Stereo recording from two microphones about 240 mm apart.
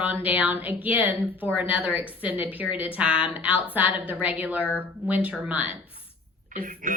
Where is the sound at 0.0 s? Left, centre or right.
Centre.